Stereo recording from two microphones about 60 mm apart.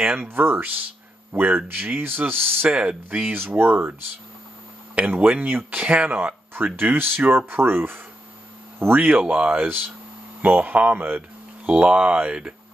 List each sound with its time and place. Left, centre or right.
0.0 s speech: right
0.3 s speech: right
2.7 s speech: centre
3.5 s speech: right
5.0 s speech: right
5.3 s speech: right
9.2 s speech: centre